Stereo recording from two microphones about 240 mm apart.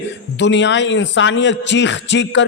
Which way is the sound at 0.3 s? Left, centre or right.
Left.